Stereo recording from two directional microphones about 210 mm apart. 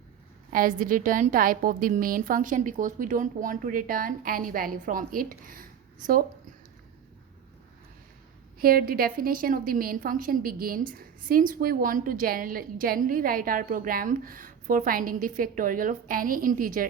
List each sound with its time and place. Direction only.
0.5 s a woman's voice: 40° right (ahead or behind)
8.5 s a woman's voice: 45° right (ahead or behind)